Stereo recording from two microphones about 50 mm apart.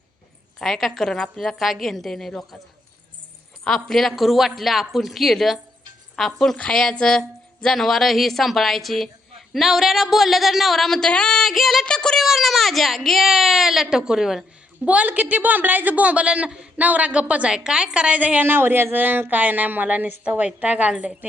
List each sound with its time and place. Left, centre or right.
0.6 s a woman's voice: centre
3.6 s a woman's voice: centre
11.9 s a woman's voice: centre
12.2 s speech: centre
14.8 s a woman's voice: right
18.2 s a woman's voice: right
18.4 s a woman's voice: right
20.6 s a woman's voice: right